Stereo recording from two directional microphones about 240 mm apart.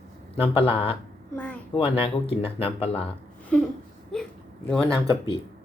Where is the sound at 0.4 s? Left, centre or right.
Left.